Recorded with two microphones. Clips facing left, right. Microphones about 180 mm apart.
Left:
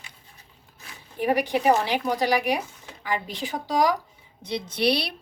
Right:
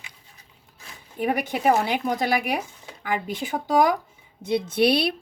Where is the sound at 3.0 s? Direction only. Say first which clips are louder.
Right 2 dB; 50° right (ahead or behind).